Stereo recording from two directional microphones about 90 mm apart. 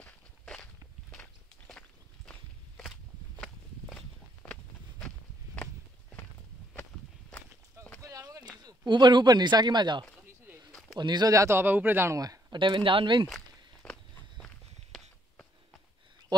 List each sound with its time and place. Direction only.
0.0 s walk: 10° left (ahead or behind)
1.7 s walk: 10° left (ahead or behind)
3.3 s walk: 5° left (ahead or behind)
5.0 s walk: 15° left (ahead or behind)
6.7 s walk: 20° left (ahead or behind)
8.0 s a sound: 40° right (ahead or behind)
8.5 s speech: 55° right (ahead or behind)
10.7 s a sound: 5° left (ahead or behind)
11.0 s speech: 55° right (ahead or behind)
11.3 s speech: 30° right (ahead or behind)
12.2 s a sound: 45° right (ahead or behind)
12.5 s speech: 65° right (ahead or behind)
13.8 s walk: 10° left (ahead or behind)